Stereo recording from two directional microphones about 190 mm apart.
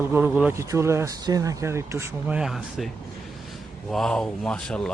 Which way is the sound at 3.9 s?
5° left (ahead or behind).